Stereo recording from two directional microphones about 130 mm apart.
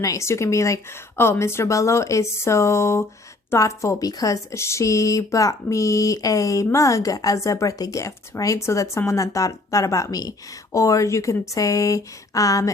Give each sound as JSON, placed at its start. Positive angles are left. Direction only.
{"t": 0.0, "sound": "a woman's voice", "side_deg": 25}